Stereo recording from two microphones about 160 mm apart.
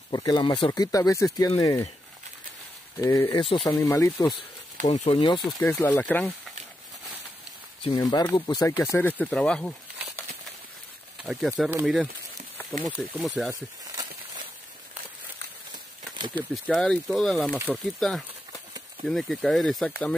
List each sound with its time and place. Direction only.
0.1 s speech: 25° left (ahead or behind)
3.0 s speech: 15° left (ahead or behind)
3.3 s speech: 35° left (ahead or behind)
3.6 s speech: 20° left (ahead or behind)
4.8 s speech: 40° left (ahead or behind)
5.7 s speech: 15° left (ahead or behind)
7.8 s speech: 25° left (ahead or behind); by 13.5 s 5° right (ahead or behind)
13.5 s a sound: 20° right (ahead or behind)
16.5 s speech: centre (ahead or behind)